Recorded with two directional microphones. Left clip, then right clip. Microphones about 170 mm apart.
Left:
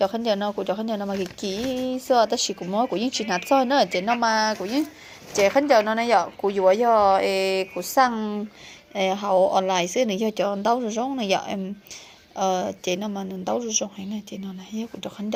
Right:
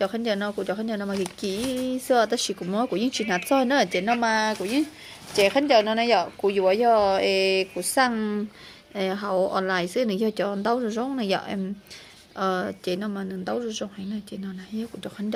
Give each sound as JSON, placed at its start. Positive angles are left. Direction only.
{"t": 0.0, "sound": "speech", "side_deg": -10}
{"t": 9.0, "sound": "speech", "side_deg": -10}
{"t": 9.8, "sound": "speech", "side_deg": -65}
{"t": 10.1, "sound": "speech", "side_deg": -15}